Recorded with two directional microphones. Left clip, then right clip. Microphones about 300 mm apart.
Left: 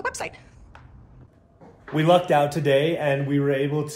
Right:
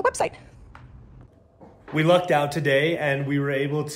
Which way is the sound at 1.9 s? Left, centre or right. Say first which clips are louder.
Left 1 dB; centre.